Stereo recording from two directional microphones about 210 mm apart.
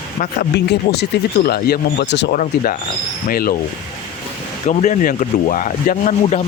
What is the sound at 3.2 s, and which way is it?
Speech, 45° left (ahead or behind).